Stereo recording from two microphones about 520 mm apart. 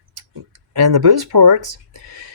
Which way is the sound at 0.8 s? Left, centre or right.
Right.